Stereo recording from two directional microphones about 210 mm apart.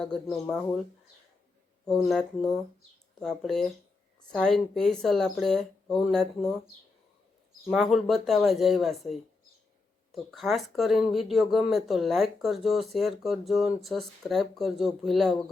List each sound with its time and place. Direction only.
0.0 s speech: 5° left (ahead or behind)
1.8 s speech: centre (ahead or behind)
7.7 s speech: centre (ahead or behind)